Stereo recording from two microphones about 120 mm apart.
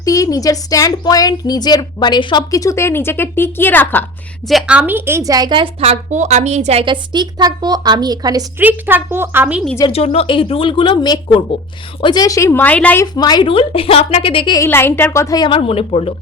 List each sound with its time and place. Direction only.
0.0 s a woman's voice: 30° left (ahead or behind)
4.4 s a woman's voice: 5° right (ahead or behind); by 5.7 s 40° right (ahead or behind)
5.8 s a woman's voice: 70° right (ahead or behind)
6.8 s a woman's voice: 40° right (ahead or behind)
8.5 s a woman's voice: 15° right (ahead or behind)
9.9 s a woman's voice: 55° left (ahead or behind); by 13.0 s 10° left (ahead or behind)
13.0 s a woman's voice: 35° left (ahead or behind)
13.5 s speech: 50° left (ahead or behind)
14.7 s a woman's voice: 20° left (ahead or behind)
15.4 s speech: 50° left (ahead or behind)